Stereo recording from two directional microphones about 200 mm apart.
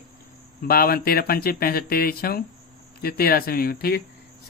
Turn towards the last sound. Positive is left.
turn(degrees=50)  # may be behind; listen again after turning